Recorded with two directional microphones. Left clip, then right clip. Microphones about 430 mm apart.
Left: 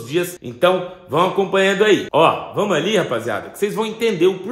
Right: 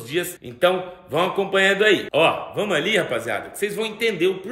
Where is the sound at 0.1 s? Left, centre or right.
Centre.